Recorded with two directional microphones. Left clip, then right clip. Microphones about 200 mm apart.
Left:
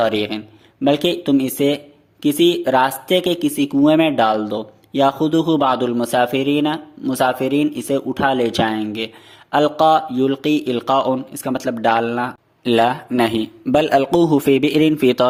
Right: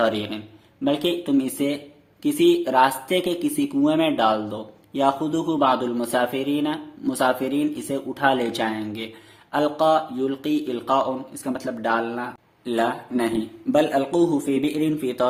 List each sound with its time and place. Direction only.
0.0 s a man's voice: 40° left (ahead or behind)